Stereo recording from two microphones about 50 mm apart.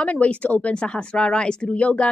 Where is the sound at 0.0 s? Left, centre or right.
Left.